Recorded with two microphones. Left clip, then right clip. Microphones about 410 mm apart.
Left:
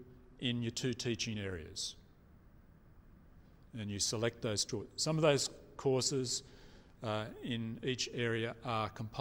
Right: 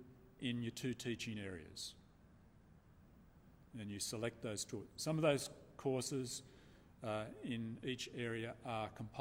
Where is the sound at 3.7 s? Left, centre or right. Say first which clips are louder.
Left 8 dB; left.